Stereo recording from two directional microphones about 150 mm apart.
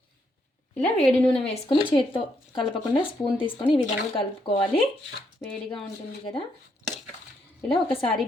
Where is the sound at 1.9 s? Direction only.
30° left (ahead or behind).